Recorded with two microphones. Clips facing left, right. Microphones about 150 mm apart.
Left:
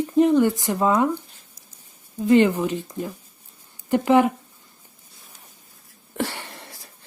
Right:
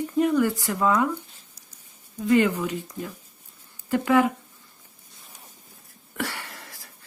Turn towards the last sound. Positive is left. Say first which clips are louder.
# left 2 dB
turn(degrees=25)  # may be behind; listen again after turning